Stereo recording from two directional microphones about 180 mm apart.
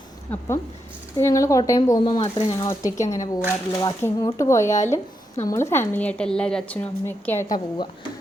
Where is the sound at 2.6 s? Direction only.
20° left (ahead or behind).